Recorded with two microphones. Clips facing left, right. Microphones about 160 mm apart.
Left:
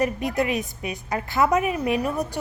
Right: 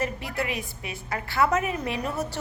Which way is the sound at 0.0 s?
20° left (ahead or behind).